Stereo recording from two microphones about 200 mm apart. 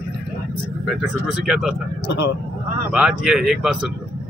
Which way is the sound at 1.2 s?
5° right (ahead or behind).